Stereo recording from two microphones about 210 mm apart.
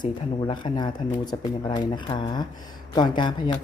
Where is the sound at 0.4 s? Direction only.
20° left (ahead or behind).